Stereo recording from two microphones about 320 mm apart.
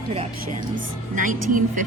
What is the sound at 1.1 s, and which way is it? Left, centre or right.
Speech, right.